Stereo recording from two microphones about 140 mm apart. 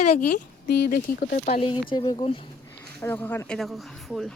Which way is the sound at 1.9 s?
30° left (ahead or behind).